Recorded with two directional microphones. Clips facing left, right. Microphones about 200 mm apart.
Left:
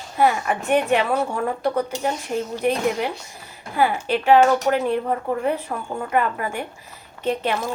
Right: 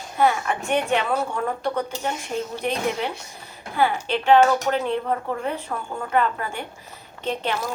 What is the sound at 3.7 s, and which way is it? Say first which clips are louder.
A woman's voice: left 2 dB; 10° left (ahead or behind).